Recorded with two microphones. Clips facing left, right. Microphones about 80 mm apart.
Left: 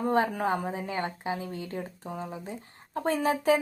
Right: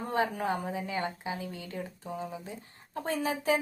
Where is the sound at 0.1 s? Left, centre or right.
Left.